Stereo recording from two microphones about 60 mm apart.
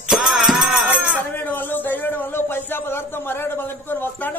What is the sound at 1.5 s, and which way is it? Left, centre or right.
Speech, left.